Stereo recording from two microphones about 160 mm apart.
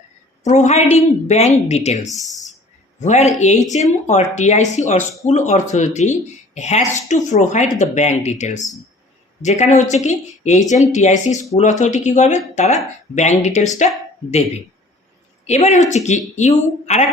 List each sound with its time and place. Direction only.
0.4 s speech: 45° left (ahead or behind)
2.0 s speech: centre (ahead or behind)
3.0 s speech: 45° left (ahead or behind)